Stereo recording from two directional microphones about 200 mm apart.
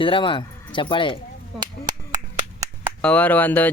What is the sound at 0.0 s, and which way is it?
Speech, 25° left (ahead or behind).